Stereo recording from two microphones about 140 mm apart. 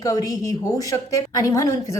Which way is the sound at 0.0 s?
25° left (ahead or behind).